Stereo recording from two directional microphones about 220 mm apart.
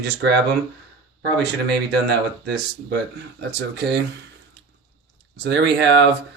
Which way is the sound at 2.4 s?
50° right (ahead or behind).